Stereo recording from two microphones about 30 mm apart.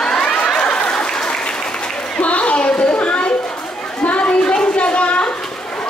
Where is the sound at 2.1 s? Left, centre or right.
Left.